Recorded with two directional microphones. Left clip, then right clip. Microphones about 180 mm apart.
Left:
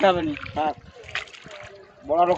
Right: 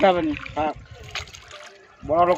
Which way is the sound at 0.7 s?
55° right (ahead or behind).